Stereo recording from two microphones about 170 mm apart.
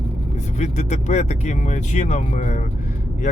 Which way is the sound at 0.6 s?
45° left (ahead or behind).